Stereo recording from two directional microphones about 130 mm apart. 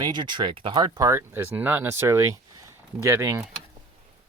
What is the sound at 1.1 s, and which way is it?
Speech, 15° right (ahead or behind).